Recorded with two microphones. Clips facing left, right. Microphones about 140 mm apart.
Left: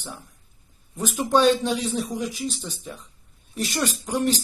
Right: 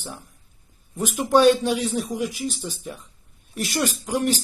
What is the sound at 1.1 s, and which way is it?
Speech, 15° right (ahead or behind).